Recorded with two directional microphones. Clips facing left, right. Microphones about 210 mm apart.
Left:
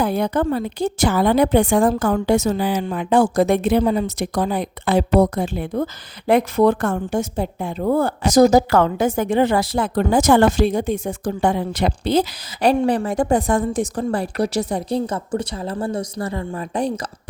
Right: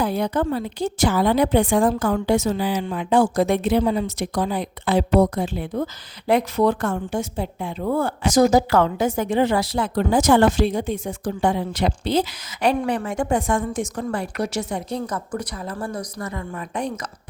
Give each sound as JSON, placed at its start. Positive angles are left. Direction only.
{"t": 0.0, "sound": "a woman's voice", "side_deg": 55}